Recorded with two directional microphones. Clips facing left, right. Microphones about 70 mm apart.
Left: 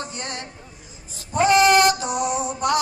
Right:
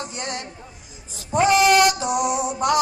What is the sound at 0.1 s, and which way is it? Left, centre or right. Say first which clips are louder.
Speech: right 2 dB; right.